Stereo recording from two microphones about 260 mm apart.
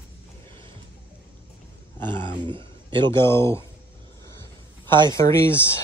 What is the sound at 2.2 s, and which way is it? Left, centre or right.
Speech, centre.